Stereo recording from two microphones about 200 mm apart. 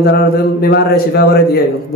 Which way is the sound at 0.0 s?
50° left (ahead or behind).